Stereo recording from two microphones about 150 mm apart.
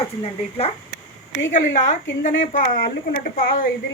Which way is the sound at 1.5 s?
55° left (ahead or behind).